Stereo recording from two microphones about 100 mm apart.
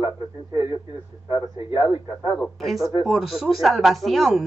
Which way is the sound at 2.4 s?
Centre (ahead or behind).